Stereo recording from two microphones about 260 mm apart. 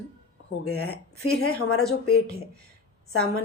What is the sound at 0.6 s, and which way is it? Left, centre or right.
A woman's voice, left.